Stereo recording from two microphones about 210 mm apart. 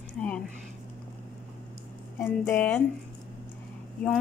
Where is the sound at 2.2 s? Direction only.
10° left (ahead or behind).